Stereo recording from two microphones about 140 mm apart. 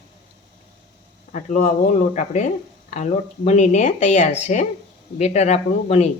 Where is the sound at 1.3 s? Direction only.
60° left (ahead or behind).